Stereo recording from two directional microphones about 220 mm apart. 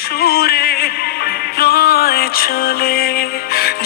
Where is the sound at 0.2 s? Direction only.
45° left (ahead or behind).